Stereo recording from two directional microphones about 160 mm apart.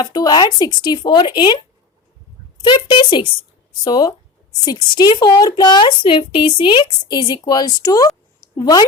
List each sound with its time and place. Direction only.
0.0 s a woman's voice: 25° left (ahead or behind)
2.6 s a woman's voice: 30° left (ahead or behind)